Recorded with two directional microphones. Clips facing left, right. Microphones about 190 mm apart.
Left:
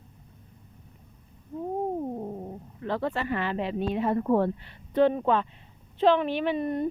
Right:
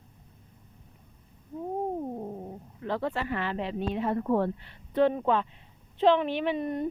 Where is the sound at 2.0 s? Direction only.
5° left (ahead or behind).